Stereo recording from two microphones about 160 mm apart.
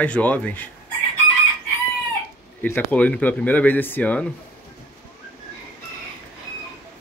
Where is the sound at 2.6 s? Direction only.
10° left (ahead or behind).